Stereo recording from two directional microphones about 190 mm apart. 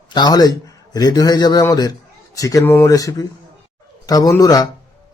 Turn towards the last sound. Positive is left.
turn(degrees=20)  # may be behind; listen again after turning